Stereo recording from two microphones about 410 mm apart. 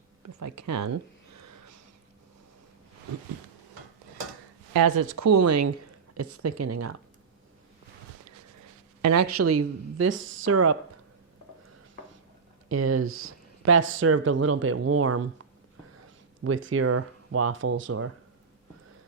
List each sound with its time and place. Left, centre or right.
0.2 s a sound: right
4.7 s speech: right
9.0 s speech: right
12.6 s speech: right
16.4 s speech: right